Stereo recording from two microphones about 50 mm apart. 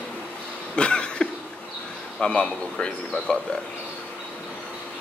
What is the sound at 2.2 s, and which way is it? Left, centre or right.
Speech, centre.